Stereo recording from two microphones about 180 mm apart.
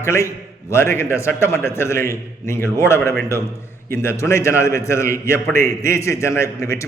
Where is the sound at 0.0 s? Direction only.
15° left (ahead or behind).